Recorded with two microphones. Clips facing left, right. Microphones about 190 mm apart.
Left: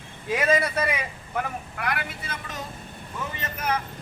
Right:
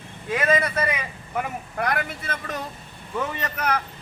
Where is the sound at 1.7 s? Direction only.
40° right (ahead or behind).